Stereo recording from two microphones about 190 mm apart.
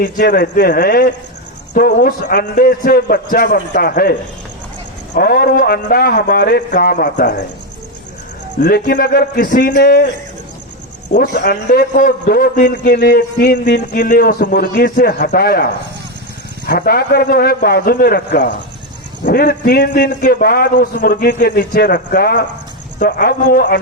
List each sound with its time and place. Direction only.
0.0 s a man's voice: 50° left (ahead or behind)
5.1 s a man's voice: 55° left (ahead or behind)
8.6 s a man's voice: 55° left (ahead or behind)
11.1 s a man's voice: 50° left (ahead or behind)
16.6 s a man's voice: 55° left (ahead or behind)